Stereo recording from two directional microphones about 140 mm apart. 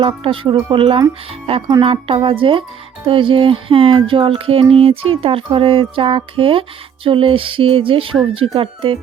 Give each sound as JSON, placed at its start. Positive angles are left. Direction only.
{"t": 0.0, "sound": "music", "side_deg": -40}